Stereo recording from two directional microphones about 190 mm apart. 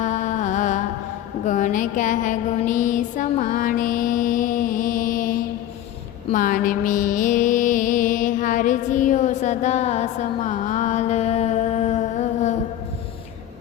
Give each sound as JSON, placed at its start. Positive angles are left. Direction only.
{"t": 0.0, "sound": "music", "side_deg": 40}
{"t": 1.5, "sound": "mantra", "side_deg": 40}
{"t": 6.3, "sound": "music", "side_deg": 45}